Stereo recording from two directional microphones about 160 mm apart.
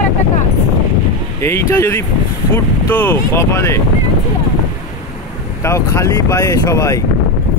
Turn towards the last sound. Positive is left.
turn(degrees=20)  # may be behind; listen again after turning